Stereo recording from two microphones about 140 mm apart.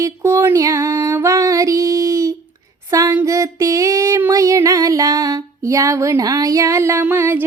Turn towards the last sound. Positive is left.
turn(degrees=-15)  # may be behind; listen again after turning